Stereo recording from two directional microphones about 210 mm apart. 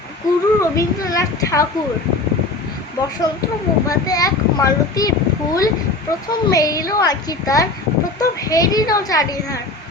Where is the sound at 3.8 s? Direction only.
15° left (ahead or behind).